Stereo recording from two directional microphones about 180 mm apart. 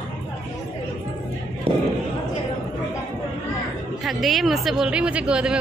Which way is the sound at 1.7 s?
30° right (ahead or behind).